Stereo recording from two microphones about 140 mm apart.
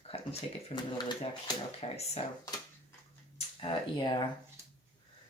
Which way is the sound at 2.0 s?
50° left (ahead or behind).